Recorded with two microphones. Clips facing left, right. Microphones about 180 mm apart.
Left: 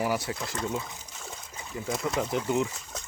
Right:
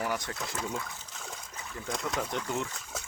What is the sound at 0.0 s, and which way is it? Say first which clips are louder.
Speech: left 4 dB; 10° left (ahead or behind).